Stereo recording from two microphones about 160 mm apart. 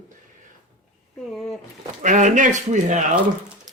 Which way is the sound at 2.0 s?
50° right (ahead or behind).